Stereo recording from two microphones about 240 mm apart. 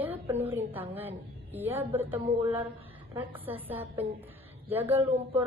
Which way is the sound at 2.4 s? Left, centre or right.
Right.